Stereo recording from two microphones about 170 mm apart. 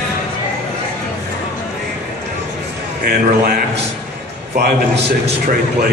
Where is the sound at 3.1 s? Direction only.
60° right (ahead or behind).